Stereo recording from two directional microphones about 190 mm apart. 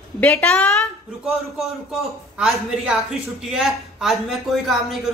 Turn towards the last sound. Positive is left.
turn(degrees=0)  # may be behind; listen again after turning